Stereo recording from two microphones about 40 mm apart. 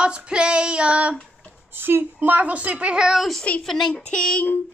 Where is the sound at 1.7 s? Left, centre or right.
Right.